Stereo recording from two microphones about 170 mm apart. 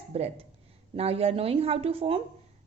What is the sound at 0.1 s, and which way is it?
Speech, 40° right (ahead or behind).